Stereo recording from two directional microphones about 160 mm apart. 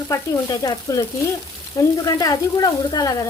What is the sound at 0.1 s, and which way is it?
Speech, 20° left (ahead or behind).